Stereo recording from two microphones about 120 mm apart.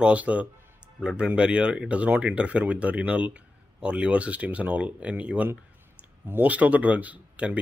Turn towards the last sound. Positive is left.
turn(degrees=-10)  # may be behind; listen again after turning